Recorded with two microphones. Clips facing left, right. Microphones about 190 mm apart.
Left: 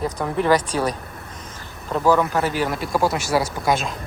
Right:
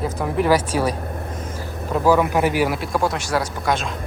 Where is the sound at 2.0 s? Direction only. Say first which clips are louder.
Right 2 dB; 10° right (ahead or behind); by 3.8 s 5° left (ahead or behind).